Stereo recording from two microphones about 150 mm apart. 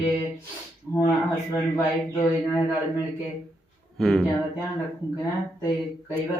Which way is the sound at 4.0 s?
Centre (ahead or behind).